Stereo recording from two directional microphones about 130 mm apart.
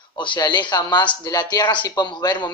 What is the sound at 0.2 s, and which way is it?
Speech, 35° left (ahead or behind).